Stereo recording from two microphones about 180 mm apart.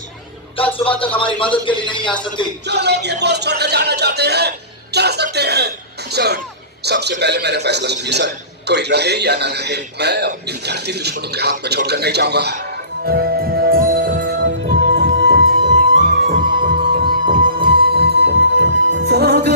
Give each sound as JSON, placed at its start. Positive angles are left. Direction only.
{"t": 0.5, "sound": "a man's voice", "side_deg": 30}
{"t": 2.6, "sound": "a man's voice", "side_deg": -70}
{"t": 13.1, "sound": "music", "side_deg": -60}
{"t": 15.0, "sound": "music", "side_deg": -65}
{"t": 16.3, "sound": "music", "side_deg": -50}